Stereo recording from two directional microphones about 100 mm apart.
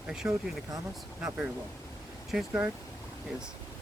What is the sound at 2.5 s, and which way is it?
Speech, 15° right (ahead or behind).